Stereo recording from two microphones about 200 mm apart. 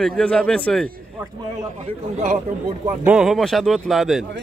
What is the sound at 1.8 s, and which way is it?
A man's voice, 35° right (ahead or behind).